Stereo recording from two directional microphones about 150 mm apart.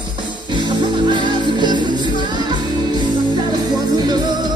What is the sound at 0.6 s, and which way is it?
Music, 30° right (ahead or behind).